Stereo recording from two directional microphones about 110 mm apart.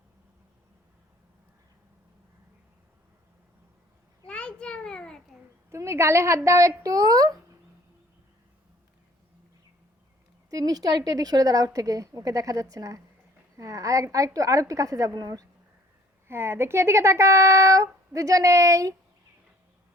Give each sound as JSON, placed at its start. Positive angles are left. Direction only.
{"t": 4.3, "sound": "a sound", "side_deg": 10}
{"t": 5.7, "sound": "speech", "side_deg": -25}
{"t": 10.5, "sound": "a woman's voice", "side_deg": -35}
{"t": 16.3, "sound": "speech", "side_deg": -20}